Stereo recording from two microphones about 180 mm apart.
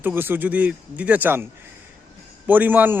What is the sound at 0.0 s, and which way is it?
A man's voice, 10° right (ahead or behind).